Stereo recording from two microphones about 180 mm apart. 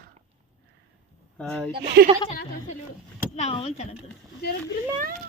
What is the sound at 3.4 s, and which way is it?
Speech, 35° left (ahead or behind).